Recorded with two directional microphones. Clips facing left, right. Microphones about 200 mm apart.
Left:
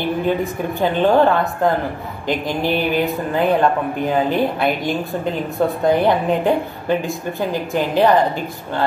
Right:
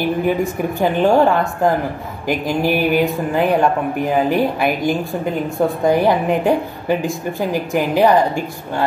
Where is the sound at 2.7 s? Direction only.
15° right (ahead or behind).